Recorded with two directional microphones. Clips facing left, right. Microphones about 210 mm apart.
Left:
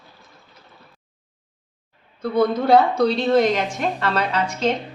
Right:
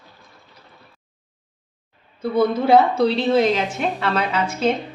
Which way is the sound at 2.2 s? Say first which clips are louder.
Right 1 dB; 5° right (ahead or behind).